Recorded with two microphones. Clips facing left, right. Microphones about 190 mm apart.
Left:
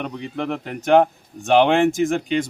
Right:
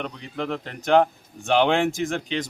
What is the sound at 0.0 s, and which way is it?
Speech, 15° left (ahead or behind).